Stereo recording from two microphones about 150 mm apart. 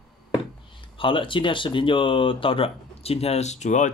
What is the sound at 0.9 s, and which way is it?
Speech, 35° left (ahead or behind).